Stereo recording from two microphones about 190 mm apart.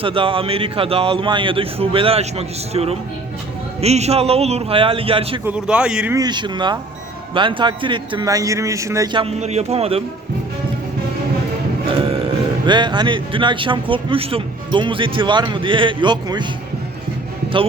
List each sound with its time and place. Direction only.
0.0 s a man's voice: 30° right (ahead or behind)
5.5 s a man's voice: 5° right (ahead or behind)
6.1 s speech: 25° right (ahead or behind)
9.2 s a man's voice: 35° right (ahead or behind)
12.6 s speech: 25° right (ahead or behind)